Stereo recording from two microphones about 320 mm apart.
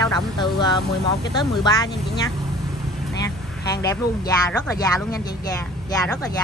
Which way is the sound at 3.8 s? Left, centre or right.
Centre.